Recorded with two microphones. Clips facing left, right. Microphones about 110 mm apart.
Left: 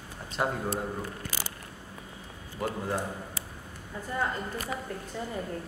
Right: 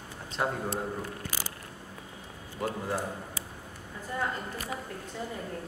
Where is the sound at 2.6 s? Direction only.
Centre (ahead or behind).